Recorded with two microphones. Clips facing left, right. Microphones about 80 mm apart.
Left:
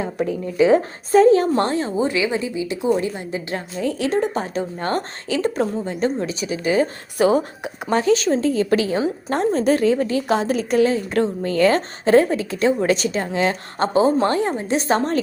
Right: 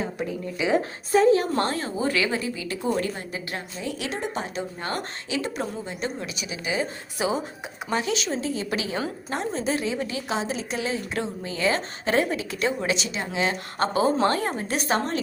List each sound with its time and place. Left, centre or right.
0.7 s a woman's voice: left
1.5 s a woman's voice: left
3.8 s a woman's voice: left
7.9 s a woman's voice: left
12.0 s a woman's voice: left